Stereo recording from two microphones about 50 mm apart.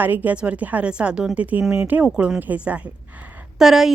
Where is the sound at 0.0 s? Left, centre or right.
Right.